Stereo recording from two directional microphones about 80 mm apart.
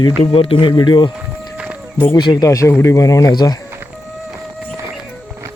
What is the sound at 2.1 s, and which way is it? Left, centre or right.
Speech, left.